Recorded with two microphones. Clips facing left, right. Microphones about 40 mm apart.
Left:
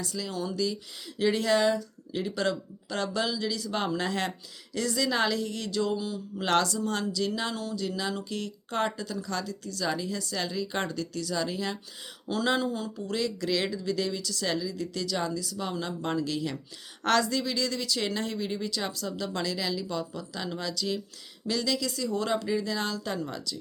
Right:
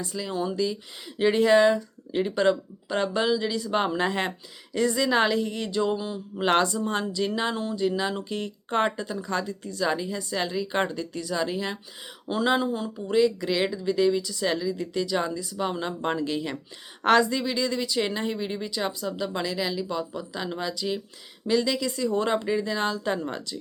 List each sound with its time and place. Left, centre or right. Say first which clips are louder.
0.0 s speech: right 4 dB; right